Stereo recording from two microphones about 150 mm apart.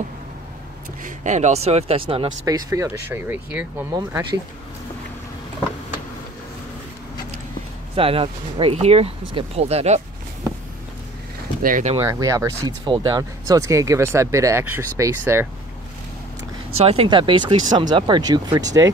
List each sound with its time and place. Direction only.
1.0 s speech: 50° right (ahead or behind); by 2.3 s 35° right (ahead or behind)
2.4 s speech: 20° right (ahead or behind)
7.9 s speech: 40° right (ahead or behind)
11.6 s speech: 65° right (ahead or behind)
12.0 s speech: 20° right (ahead or behind)
16.7 s speech: 40° right (ahead or behind); by 18.9 s 25° right (ahead or behind)